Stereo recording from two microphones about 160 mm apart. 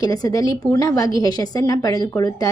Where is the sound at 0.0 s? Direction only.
20° left (ahead or behind).